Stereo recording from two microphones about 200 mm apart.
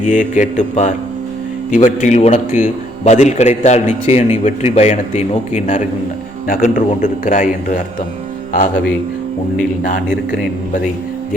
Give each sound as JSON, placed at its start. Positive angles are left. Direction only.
{"t": 0.0, "sound": "a man's voice", "side_deg": 40}